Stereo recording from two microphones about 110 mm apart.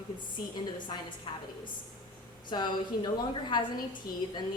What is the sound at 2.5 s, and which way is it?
A woman's voice, 40° left (ahead or behind).